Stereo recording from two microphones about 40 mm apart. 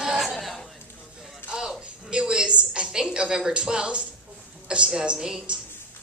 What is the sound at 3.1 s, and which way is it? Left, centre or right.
A woman's voice, right.